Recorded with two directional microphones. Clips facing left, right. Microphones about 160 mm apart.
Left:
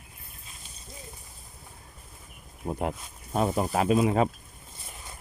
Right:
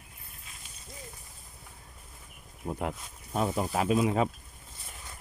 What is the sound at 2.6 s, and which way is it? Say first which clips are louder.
Speech: left 3 dB; 35° left (ahead or behind).